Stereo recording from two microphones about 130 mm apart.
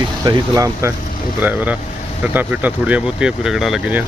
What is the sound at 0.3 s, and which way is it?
Speech, 25° right (ahead or behind).